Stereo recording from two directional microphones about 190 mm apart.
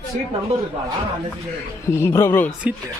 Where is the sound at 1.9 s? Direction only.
15° left (ahead or behind).